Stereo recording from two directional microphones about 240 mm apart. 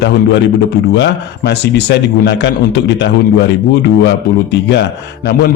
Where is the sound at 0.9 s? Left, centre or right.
Left.